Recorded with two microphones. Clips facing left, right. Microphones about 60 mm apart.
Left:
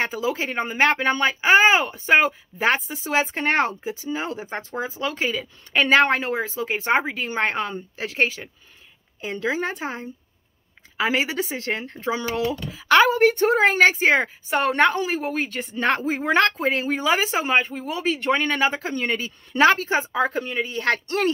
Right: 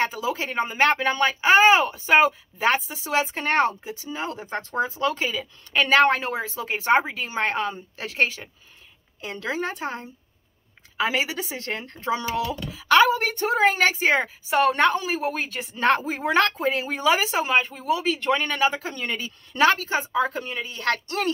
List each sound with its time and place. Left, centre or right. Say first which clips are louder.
0.0 s speech: left 1 dB; centre
5.4 s speech: left 2 dB; centre
5.9 s speech: even; centre
13.2 s speech: left 7 dB; left
13.6 s speech: even; centre
20.1 s speech: left 1 dB; centre